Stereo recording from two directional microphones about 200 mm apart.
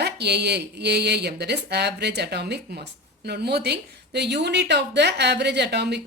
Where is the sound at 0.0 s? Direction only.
55° right (ahead or behind).